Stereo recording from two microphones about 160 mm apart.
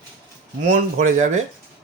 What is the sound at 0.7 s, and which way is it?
Speech, 50° right (ahead or behind).